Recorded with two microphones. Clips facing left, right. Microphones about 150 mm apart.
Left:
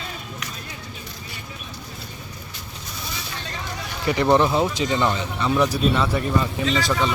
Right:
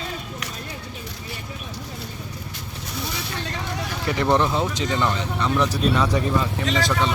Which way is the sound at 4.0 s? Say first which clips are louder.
Left 3 dB; 5° left (ahead or behind).